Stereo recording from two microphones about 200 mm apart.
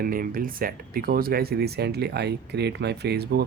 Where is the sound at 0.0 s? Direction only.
45° right (ahead or behind).